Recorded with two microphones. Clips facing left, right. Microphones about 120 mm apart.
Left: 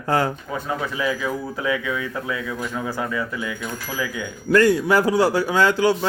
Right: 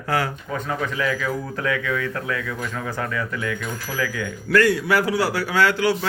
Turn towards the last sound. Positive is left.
turn(degrees=20)  # may be behind; listen again after turning